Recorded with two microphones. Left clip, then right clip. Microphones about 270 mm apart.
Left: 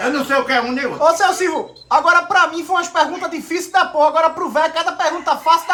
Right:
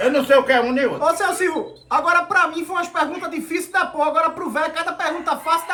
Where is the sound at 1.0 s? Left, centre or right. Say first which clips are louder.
Left 9 dB; left.